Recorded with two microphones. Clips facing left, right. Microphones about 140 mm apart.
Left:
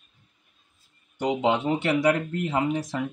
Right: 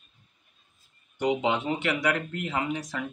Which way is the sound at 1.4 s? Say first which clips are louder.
Left 4 dB; 35° left (ahead or behind).